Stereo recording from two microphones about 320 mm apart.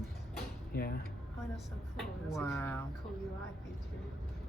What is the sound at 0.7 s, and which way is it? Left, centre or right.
Speech, left.